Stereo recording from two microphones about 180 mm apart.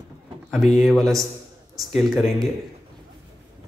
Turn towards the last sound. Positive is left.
turn(degrees=0)  # may be behind; listen again after turning